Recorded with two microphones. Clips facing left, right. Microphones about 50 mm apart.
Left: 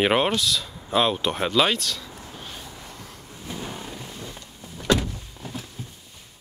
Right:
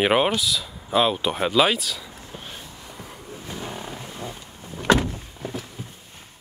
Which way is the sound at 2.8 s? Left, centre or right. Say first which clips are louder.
Right 3 dB; centre.